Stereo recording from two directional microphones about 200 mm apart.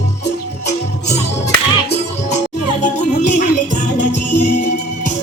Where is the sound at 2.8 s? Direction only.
40° left (ahead or behind).